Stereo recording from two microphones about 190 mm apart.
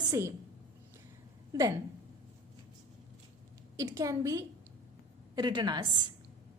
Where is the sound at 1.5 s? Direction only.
15° right (ahead or behind).